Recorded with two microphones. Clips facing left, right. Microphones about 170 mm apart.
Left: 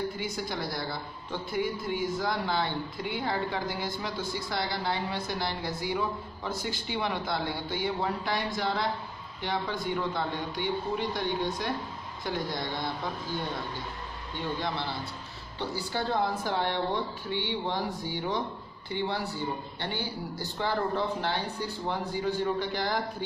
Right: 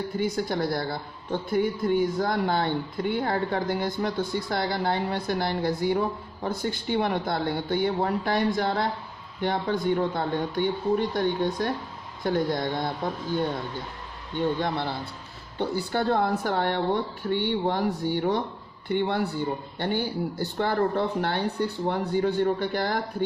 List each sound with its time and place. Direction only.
0.2 s a woman's voice: 50° right (ahead or behind)
14.6 s a woman's voice: 55° right (ahead or behind)